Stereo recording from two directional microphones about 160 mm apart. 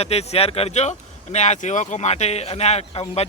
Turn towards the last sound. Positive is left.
turn(degrees=40)  # may be behind; listen again after turning